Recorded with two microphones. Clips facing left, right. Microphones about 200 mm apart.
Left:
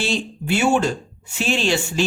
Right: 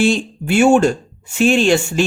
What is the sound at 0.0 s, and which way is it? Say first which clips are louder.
Speech: right 8 dB; 50° right (ahead or behind).